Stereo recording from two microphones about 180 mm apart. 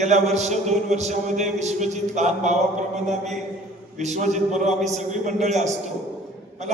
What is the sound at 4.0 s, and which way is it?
A man's voice, 40° right (ahead or behind).